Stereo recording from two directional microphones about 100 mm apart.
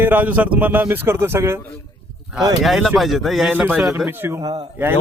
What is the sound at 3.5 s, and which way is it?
Speech, 20° right (ahead or behind).